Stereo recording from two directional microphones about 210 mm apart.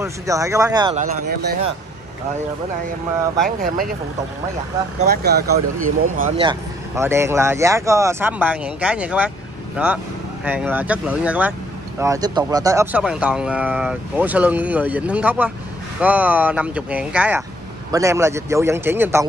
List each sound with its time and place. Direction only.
0.0 s speech: 15° right (ahead or behind)
3.4 s speech: 40° right (ahead or behind)
5.0 s speech: 50° right (ahead or behind)
6.4 s speech: 15° right (ahead or behind)
13.0 s speech: 5° right (ahead or behind)